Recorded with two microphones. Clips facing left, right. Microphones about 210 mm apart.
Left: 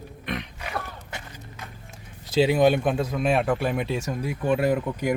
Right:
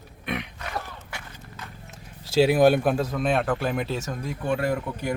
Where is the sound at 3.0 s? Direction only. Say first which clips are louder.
Left 1 dB; 5° left (ahead or behind).